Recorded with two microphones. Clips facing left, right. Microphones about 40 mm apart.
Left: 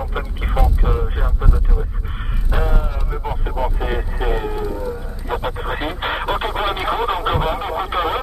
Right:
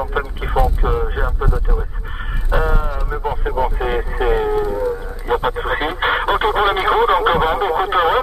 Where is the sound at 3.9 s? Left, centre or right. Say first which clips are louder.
Right 5 dB; centre.